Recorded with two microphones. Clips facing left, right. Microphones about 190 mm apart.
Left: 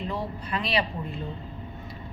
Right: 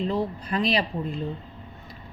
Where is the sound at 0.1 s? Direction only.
40° right (ahead or behind).